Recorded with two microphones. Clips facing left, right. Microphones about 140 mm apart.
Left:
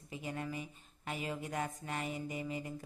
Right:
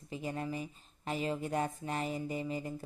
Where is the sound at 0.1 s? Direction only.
30° right (ahead or behind).